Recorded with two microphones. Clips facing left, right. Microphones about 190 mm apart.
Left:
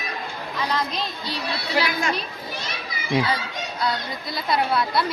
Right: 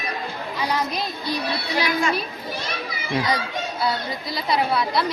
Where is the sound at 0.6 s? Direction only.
10° right (ahead or behind).